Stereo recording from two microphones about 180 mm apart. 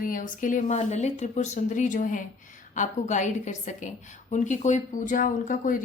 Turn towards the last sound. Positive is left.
turn(degrees=45)  # may be behind; listen again after turning